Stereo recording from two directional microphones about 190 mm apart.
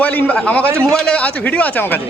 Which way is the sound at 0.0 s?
10° left (ahead or behind).